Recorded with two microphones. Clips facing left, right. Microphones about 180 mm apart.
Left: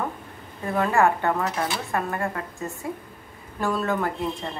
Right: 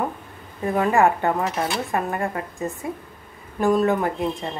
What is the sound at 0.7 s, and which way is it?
A woman's voice, 20° right (ahead or behind).